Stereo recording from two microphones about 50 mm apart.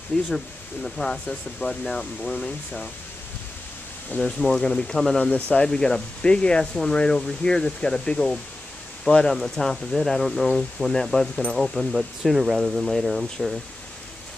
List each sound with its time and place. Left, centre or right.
0.1 s speech: centre
4.2 s speech: centre
5.2 s speech: left; by 13.6 s centre